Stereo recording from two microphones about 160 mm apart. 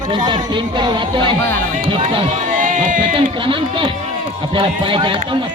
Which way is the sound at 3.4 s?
30° right (ahead or behind).